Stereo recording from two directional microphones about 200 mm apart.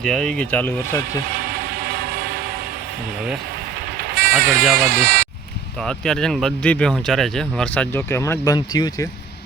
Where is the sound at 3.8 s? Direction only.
50° right (ahead or behind).